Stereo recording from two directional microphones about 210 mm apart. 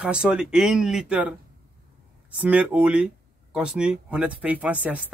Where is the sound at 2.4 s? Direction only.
5° right (ahead or behind).